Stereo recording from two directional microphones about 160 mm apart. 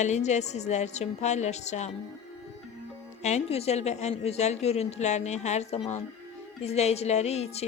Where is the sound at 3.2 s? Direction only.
40° left (ahead or behind).